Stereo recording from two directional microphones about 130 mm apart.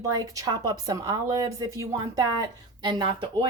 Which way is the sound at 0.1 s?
30° right (ahead or behind).